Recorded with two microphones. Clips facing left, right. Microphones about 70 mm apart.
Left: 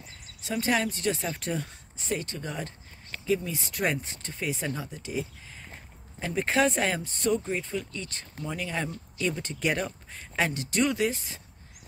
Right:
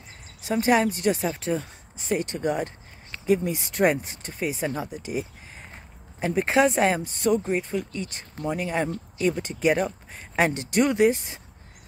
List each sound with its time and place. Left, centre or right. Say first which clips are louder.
0.5 s speech: right 6 dB; right
1.3 s speech: right 5 dB; centre
2.1 s speech: right 9 dB; right
6.1 s speech: right 5 dB; centre
10.1 s speech: right 5 dB; right